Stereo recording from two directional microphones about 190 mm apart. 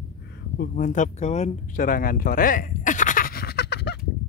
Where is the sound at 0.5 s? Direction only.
50° left (ahead or behind).